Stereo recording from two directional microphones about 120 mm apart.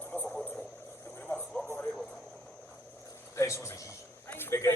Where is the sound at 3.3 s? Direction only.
25° left (ahead or behind).